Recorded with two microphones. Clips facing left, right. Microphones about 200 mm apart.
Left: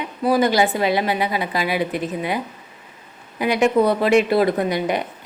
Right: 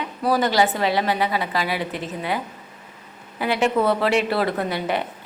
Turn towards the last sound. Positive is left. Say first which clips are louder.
# left 3 dB
turn(degrees=15)  # may be behind; listen again after turning